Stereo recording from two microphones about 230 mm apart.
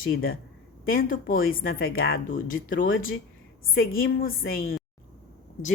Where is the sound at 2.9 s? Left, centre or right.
Left.